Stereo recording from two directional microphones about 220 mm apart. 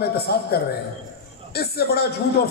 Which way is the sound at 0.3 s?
45° left (ahead or behind).